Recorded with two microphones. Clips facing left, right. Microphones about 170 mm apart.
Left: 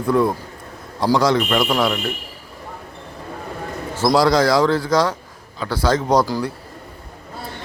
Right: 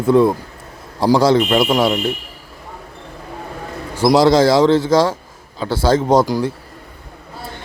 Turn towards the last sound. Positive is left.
turn(degrees=-20)  # may be behind; listen again after turning